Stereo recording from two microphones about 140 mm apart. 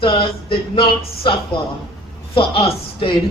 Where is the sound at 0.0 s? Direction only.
40° left (ahead or behind).